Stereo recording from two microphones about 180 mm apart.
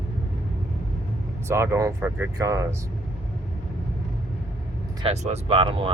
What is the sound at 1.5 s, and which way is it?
Speech, 15° right (ahead or behind).